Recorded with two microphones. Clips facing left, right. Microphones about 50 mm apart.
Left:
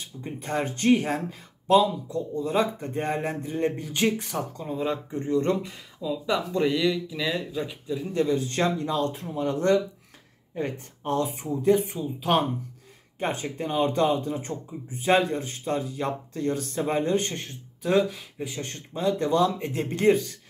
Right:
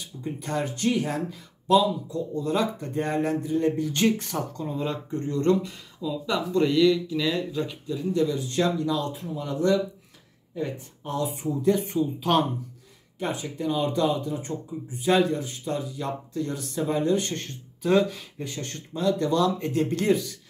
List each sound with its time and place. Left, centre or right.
0.0 s speech: left
2.3 s speech: left
3.9 s speech: centre
8.1 s speech: left
11.4 s speech: left
11.9 s speech: centre
13.2 s speech: left
17.3 s speech: centre
18.6 s speech: left